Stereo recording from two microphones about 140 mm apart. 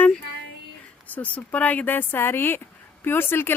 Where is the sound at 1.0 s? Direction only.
10° left (ahead or behind).